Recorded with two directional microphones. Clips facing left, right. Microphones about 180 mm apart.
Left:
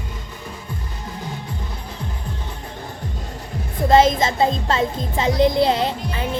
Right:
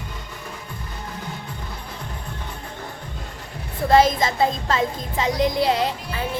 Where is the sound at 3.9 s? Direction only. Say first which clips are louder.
Left 2 dB; 25° left (ahead or behind).